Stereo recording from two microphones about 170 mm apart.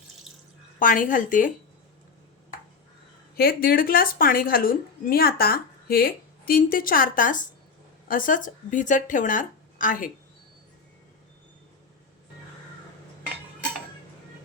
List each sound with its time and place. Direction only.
0.3 s water: centre (ahead or behind)
0.8 s speech: 50° left (ahead or behind)
3.3 s a woman's voice: 60° left (ahead or behind)